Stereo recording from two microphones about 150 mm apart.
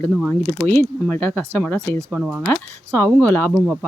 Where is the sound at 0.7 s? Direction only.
15° left (ahead or behind).